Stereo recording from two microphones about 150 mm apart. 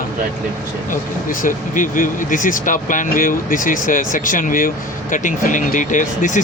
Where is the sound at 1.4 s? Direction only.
60° left (ahead or behind).